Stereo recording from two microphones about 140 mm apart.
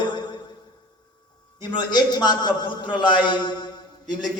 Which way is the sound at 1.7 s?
30° left (ahead or behind).